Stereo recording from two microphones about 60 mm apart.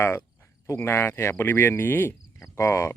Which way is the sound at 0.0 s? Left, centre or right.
Left.